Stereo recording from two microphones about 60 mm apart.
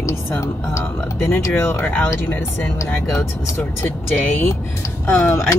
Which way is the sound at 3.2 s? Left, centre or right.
Left.